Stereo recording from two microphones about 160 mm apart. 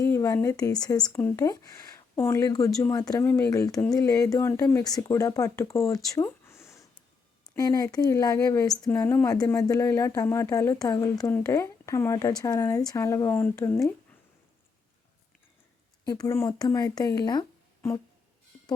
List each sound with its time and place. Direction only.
0.0 s speech: 20° left (ahead or behind)
16.0 s speech: 25° left (ahead or behind)